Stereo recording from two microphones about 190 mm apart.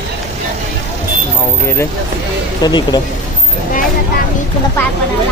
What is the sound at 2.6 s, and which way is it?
Speech, 20° left (ahead or behind).